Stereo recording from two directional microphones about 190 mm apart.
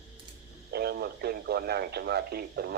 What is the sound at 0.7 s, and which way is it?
Speech, 55° right (ahead or behind).